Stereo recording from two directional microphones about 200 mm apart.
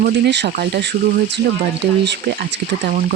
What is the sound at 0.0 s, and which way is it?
Speech, 55° right (ahead or behind).